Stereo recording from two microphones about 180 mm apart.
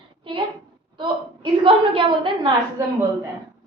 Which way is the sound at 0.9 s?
25° right (ahead or behind).